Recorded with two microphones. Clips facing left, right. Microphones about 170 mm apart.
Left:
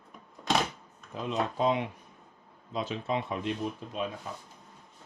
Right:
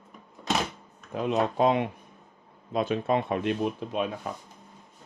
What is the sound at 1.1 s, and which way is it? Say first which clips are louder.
Speech: right 6 dB; 60° right (ahead or behind).